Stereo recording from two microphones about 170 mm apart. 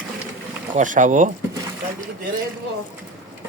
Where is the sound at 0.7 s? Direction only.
50° right (ahead or behind).